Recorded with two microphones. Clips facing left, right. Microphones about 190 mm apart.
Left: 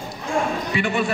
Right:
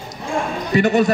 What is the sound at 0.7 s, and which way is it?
Speech, 40° right (ahead or behind).